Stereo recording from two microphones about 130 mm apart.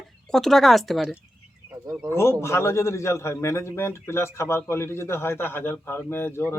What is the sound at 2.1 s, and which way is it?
A man's voice, 20° left (ahead or behind).